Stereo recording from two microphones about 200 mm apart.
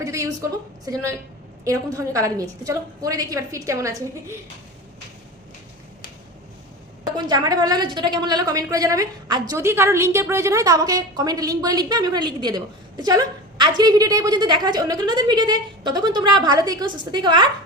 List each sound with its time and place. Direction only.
0.0 s a sound: 15° right (ahead or behind)
0.9 s a woman's voice: 15° right (ahead or behind)
7.0 s a woman's voice: 20° right (ahead or behind)